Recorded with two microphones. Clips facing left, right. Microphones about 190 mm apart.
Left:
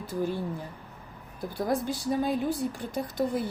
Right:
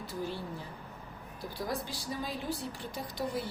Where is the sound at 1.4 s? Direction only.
55° left (ahead or behind).